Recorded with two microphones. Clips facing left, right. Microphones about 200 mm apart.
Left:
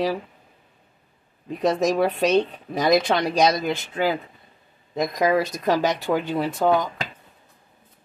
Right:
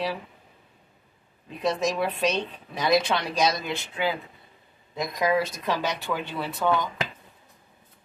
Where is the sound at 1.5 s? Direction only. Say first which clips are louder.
Left 5 dB; 45° left (ahead or behind).